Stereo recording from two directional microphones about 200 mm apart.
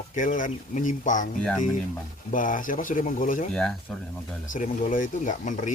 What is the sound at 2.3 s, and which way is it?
Speech, 40° left (ahead or behind).